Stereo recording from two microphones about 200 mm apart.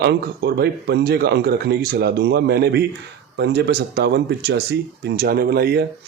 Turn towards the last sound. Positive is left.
turn(degrees=-50)  # may be behind; listen again after turning